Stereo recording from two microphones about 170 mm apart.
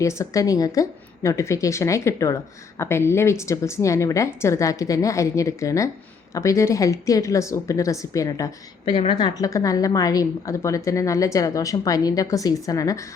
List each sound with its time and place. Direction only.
0.0 s a woman's voice: 15° left (ahead or behind)
8.8 s a woman's voice: 30° left (ahead or behind)